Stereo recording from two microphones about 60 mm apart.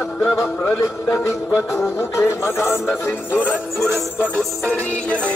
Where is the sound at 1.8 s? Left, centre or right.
Left.